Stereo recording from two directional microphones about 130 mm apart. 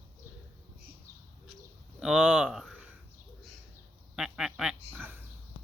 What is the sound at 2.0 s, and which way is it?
Speech, 5° right (ahead or behind).